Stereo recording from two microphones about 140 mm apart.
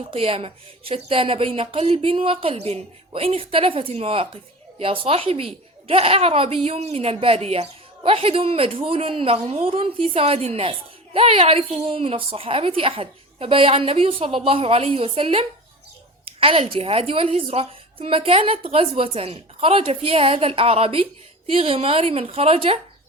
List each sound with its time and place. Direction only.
0.1 s a woman's voice: 45° right (ahead or behind)